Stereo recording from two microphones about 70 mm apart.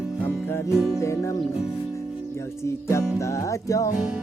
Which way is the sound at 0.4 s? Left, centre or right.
Left.